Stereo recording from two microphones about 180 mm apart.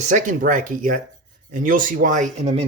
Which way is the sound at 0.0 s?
45° right (ahead or behind).